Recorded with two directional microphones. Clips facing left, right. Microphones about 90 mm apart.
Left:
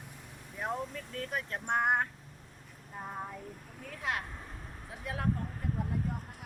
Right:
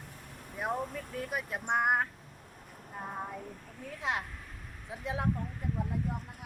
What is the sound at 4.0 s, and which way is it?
Speech, 20° right (ahead or behind).